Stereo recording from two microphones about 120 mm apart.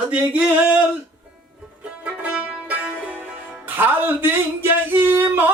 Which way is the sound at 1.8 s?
10° right (ahead or behind).